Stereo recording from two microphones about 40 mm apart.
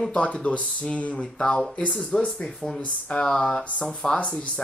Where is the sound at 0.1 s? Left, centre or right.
Left.